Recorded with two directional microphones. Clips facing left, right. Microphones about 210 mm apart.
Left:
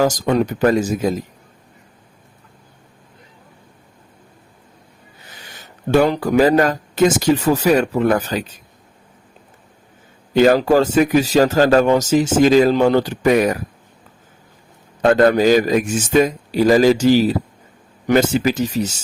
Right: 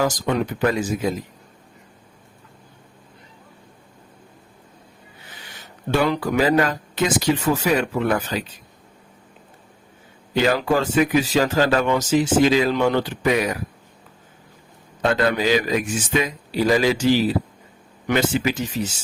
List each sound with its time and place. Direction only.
0.0 s speech: 45° left (ahead or behind)
5.9 s speech: 45° left (ahead or behind)
10.3 s speech: 45° left (ahead or behind)
15.0 s speech: 50° left (ahead or behind)